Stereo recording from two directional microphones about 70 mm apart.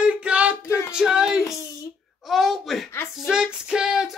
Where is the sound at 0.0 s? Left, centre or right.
Centre.